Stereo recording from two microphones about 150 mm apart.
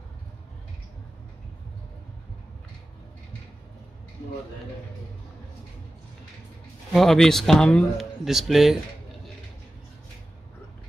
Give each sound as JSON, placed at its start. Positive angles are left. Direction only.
{"t": 6.9, "sound": "speech", "side_deg": 0}